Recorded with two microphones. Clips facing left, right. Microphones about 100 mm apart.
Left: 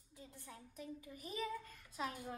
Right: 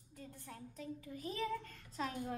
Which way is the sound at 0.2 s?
15° left (ahead or behind).